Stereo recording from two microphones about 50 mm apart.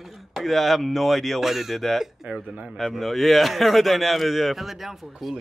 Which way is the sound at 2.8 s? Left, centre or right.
Centre.